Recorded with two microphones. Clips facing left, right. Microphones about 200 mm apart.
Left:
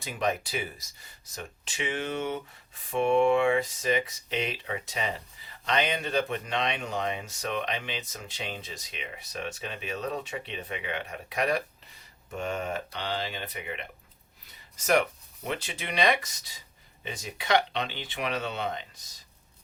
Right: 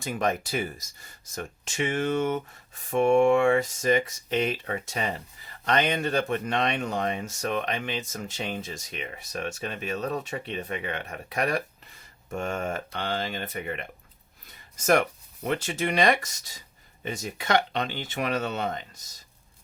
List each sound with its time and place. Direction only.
0.0 s speech: 45° right (ahead or behind)
14.8 s speech: 45° right (ahead or behind)